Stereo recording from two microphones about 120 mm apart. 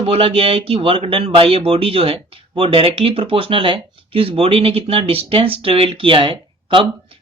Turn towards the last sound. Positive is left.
turn(degrees=-45)  # may be behind; listen again after turning